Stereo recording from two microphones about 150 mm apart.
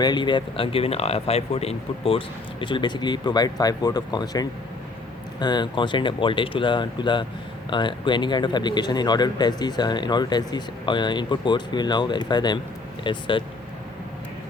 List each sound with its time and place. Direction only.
0.0 s a man's voice: 30° left (ahead or behind)